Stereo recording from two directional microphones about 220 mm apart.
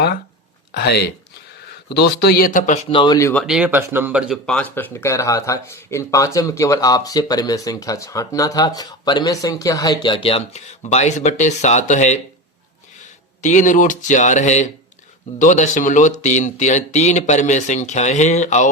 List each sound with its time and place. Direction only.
0.7 s speech: 50° left (ahead or behind); by 3.4 s 15° left (ahead or behind)
3.4 s speech: 5° right (ahead or behind); by 12.2 s 30° left (ahead or behind)
13.4 s speech: 35° left (ahead or behind)